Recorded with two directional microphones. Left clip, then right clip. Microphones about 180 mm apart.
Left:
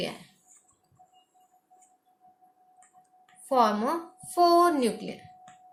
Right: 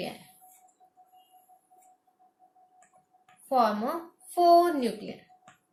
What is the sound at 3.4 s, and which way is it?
Speech, 45° left (ahead or behind).